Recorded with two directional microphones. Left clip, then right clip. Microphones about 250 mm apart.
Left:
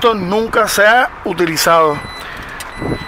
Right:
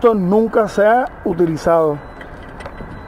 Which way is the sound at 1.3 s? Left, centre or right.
Centre.